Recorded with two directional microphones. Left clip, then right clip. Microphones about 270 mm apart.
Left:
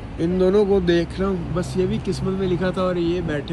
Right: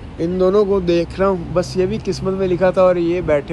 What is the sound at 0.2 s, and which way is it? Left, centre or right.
Speech, centre.